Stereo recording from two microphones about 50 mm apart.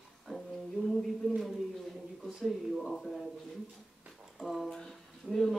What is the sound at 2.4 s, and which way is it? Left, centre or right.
Speech, centre.